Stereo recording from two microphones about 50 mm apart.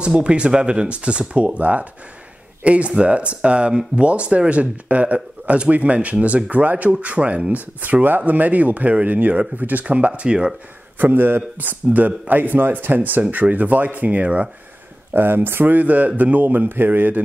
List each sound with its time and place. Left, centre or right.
0.0 s speech: right
7.8 s speech: right; by 10.5 s centre
11.0 s speech: right
15.1 s speech: right
15.7 s speech: right